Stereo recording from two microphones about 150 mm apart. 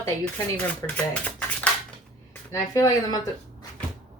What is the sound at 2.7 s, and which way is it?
Speech, 25° left (ahead or behind).